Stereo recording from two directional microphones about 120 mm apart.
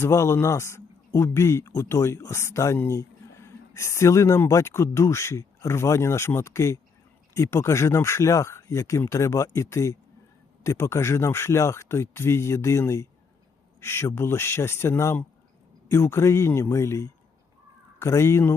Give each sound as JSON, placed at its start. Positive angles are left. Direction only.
{"t": 0.0, "sound": "a man's voice", "side_deg": 25}